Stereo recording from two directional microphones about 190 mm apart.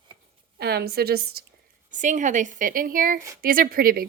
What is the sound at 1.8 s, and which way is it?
A woman's voice, 40° right (ahead or behind).